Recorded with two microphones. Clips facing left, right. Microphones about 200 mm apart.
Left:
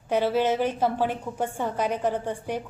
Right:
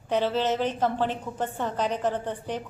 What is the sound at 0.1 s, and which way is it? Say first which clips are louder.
A woman's voice: left 2 dB; 10° left (ahead or behind).